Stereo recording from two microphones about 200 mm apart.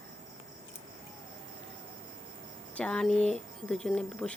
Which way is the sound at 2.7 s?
5° left (ahead or behind).